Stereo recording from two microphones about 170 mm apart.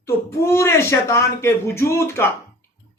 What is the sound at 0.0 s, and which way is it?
A man's voice, 15° left (ahead or behind).